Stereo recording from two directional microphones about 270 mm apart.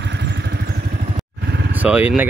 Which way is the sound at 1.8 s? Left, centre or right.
Centre.